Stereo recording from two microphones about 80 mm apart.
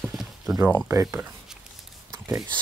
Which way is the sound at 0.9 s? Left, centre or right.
Right.